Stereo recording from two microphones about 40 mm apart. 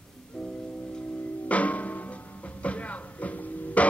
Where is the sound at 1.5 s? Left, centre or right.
Left.